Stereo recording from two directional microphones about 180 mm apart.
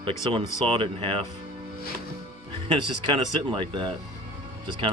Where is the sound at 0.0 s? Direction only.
30° right (ahead or behind).